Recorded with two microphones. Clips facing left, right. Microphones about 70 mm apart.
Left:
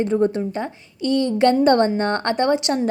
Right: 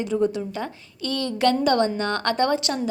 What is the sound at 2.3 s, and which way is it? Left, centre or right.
Speech, left.